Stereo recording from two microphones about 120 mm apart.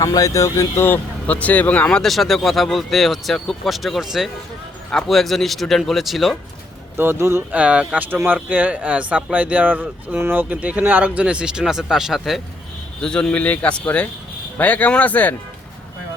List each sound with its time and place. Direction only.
0.0 s speech: 30° left (ahead or behind); by 6.3 s centre (ahead or behind)
6.9 s speech: 20° right (ahead or behind)
7.6 s speech: 10° right (ahead or behind); by 15.4 s 15° left (ahead or behind)